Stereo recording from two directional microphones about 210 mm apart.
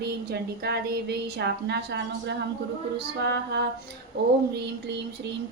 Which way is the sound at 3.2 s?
55° right (ahead or behind).